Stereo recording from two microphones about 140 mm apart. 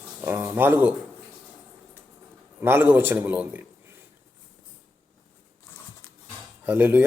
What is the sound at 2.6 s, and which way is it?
Speech, 15° right (ahead or behind).